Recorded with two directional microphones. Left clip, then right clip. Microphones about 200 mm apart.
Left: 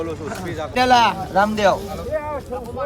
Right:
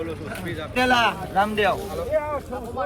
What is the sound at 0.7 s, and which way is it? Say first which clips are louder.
Speech: left 5 dB; 35° left (ahead or behind).